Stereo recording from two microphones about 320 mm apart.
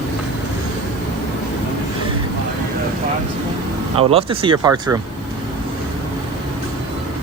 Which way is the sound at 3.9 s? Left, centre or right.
Centre.